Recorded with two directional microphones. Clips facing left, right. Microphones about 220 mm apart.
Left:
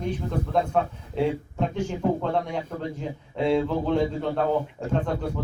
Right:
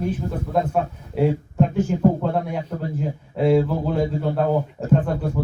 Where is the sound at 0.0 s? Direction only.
5° right (ahead or behind).